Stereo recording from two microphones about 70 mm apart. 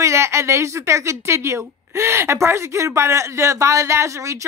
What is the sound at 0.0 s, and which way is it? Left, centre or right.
A woman's voice, right.